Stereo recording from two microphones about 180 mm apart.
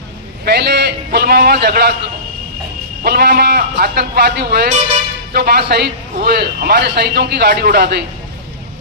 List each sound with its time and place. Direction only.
0.4 s a man's voice: 65° right (ahead or behind)
3.0 s a man's voice: 60° right (ahead or behind)